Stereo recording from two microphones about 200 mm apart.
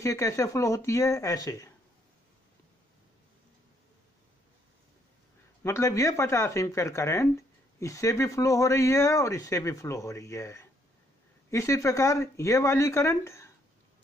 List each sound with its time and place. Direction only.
0.0 s speech: 15° left (ahead or behind)
5.6 s speech: 15° left (ahead or behind)